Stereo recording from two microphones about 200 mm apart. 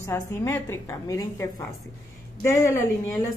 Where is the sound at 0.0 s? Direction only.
15° left (ahead or behind).